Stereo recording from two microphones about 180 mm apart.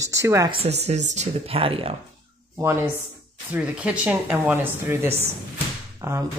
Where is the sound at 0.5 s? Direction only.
35° right (ahead or behind).